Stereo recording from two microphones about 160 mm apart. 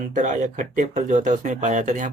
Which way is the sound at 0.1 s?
50° right (ahead or behind).